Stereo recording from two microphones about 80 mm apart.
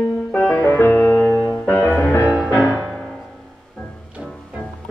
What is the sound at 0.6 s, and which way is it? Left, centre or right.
Music, left.